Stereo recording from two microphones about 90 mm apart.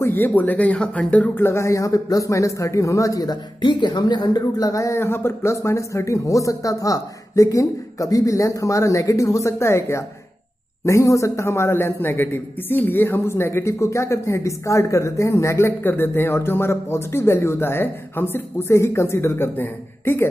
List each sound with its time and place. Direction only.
0.0 s a man's voice: 20° left (ahead or behind); by 3.3 s 40° left (ahead or behind)
3.6 s a man's voice: 55° left (ahead or behind); by 20.2 s 25° left (ahead or behind)